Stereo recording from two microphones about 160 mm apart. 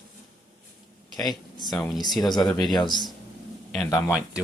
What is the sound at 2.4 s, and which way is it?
Speech, centre (ahead or behind).